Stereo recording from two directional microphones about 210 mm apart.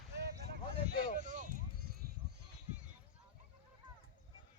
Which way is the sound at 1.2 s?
40° right (ahead or behind).